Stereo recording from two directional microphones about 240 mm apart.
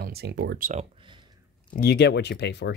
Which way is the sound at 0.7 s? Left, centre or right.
Right.